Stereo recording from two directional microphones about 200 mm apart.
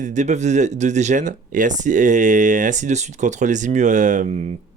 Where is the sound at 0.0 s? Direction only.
35° right (ahead or behind).